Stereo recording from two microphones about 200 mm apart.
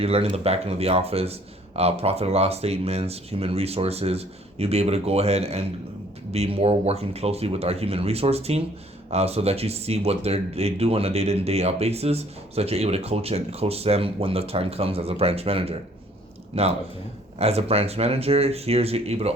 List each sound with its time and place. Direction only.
0.0 s speech: 30° right (ahead or behind)